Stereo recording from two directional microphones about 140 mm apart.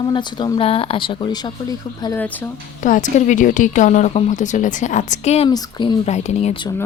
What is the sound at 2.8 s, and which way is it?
Speech, 65° left (ahead or behind).